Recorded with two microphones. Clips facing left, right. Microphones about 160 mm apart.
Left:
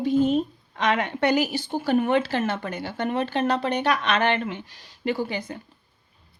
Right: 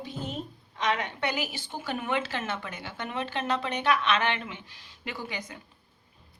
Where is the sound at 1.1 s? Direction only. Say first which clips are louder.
Left 10 dB; 40° left (ahead or behind).